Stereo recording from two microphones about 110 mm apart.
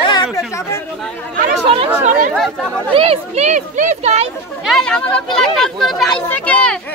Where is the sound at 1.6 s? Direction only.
55° right (ahead or behind).